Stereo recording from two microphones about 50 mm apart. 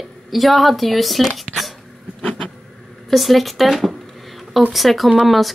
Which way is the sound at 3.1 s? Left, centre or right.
Centre.